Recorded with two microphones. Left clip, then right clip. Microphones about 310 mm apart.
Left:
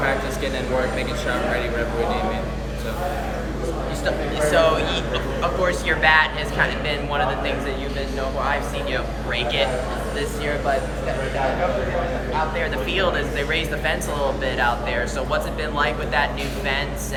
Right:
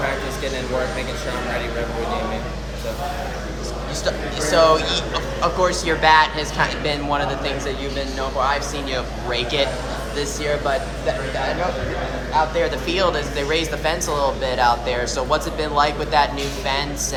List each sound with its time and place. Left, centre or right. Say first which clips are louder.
4.0 s speech: left 1 dB; centre
9.3 s speech: right 1 dB; centre
12.5 s speech: right 2 dB; centre